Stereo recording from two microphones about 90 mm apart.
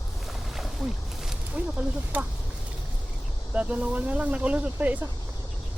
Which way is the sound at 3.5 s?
15° right (ahead or behind).